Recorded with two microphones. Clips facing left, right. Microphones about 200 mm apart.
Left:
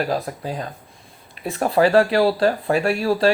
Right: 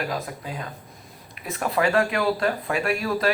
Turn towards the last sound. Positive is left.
turn(degrees=30)  # may be behind; listen again after turning